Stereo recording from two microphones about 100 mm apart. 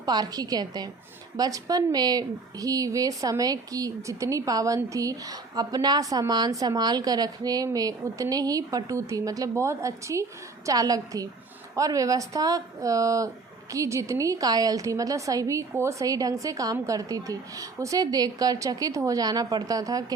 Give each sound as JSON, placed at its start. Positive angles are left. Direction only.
{"t": 0.0, "sound": "a woman's voice", "side_deg": -40}